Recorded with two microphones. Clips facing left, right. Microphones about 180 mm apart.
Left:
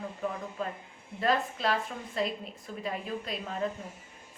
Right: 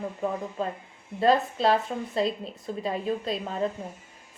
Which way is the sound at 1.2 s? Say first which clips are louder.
Right 7 dB; 30° right (ahead or behind).